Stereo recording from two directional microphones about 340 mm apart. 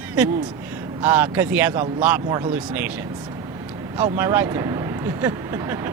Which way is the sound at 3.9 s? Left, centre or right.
Centre.